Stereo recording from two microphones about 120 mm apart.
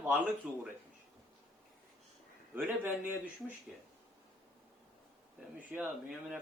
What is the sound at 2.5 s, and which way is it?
A man's voice, 15° right (ahead or behind).